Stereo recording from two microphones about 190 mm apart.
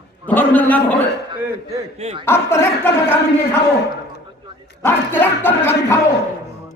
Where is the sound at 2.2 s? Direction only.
15° left (ahead or behind).